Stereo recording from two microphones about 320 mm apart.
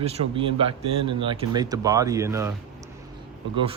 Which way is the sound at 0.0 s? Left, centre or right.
Centre.